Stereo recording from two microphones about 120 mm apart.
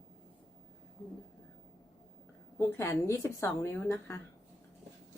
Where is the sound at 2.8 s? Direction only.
20° left (ahead or behind).